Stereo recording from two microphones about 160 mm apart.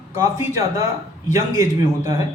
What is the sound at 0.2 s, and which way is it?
Speech, 20° right (ahead or behind).